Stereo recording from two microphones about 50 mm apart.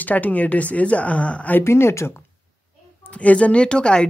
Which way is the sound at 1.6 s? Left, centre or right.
Left.